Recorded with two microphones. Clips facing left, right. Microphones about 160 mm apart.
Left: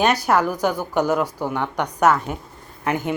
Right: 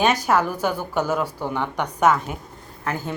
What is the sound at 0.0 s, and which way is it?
A woman's voice, 10° left (ahead or behind).